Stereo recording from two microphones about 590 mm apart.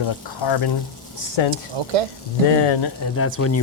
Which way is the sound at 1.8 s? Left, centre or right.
Right.